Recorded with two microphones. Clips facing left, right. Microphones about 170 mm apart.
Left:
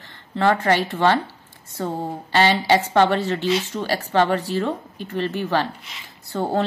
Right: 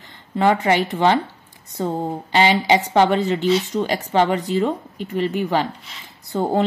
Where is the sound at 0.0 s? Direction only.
15° right (ahead or behind).